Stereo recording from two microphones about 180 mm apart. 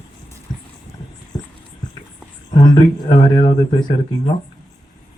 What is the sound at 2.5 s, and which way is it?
Speech, 25° left (ahead or behind).